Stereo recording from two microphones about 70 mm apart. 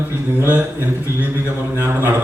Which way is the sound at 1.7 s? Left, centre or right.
Right.